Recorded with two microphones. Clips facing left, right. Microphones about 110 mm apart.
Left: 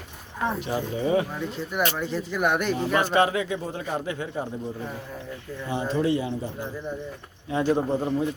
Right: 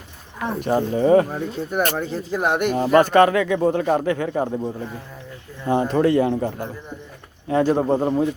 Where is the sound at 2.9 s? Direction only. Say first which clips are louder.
Right 8 dB; 50° right (ahead or behind).